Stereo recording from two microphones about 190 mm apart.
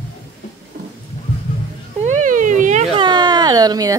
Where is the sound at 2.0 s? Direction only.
40° right (ahead or behind).